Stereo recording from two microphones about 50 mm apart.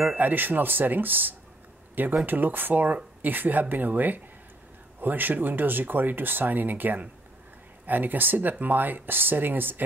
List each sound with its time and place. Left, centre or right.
0.2 s speech: right